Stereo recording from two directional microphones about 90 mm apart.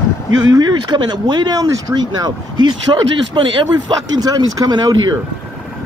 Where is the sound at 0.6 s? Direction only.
55° right (ahead or behind).